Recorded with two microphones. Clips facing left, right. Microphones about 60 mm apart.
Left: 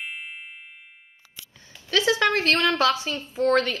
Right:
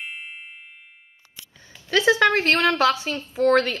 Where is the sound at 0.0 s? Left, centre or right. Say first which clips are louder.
Even; centre.